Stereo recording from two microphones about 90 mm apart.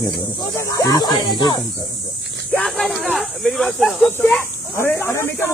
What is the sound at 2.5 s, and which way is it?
Speech, 5° left (ahead or behind).